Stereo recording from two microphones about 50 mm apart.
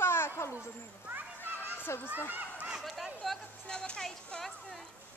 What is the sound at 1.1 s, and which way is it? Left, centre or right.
Children playing, right.